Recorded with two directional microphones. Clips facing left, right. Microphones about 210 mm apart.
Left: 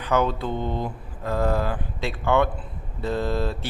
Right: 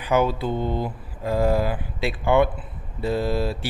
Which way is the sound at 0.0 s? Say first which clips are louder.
Right 2 dB; 10° right (ahead or behind).